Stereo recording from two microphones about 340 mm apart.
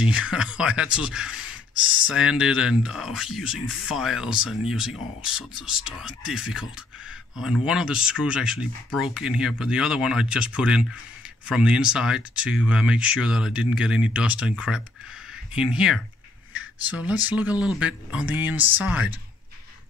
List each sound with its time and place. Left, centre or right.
0.1 s speech: centre